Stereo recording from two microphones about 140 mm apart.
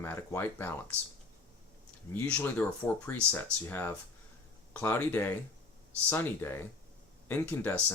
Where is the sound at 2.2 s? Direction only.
10° left (ahead or behind).